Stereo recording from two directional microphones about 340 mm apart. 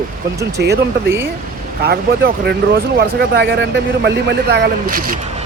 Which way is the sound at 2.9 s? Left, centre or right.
Right.